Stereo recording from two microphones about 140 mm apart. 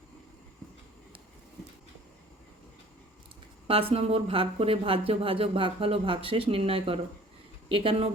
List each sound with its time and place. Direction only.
3.7 s speech: 40° right (ahead or behind)